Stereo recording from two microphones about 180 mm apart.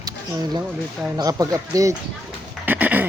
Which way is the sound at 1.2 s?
20° right (ahead or behind).